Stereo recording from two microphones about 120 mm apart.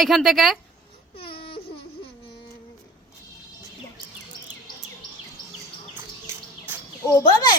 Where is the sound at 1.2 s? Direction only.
50° left (ahead or behind).